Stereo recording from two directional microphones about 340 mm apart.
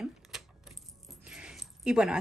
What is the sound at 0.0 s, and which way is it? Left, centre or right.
Speech, centre.